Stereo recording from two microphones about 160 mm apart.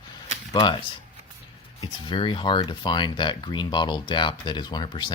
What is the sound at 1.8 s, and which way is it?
Speech, 30° left (ahead or behind).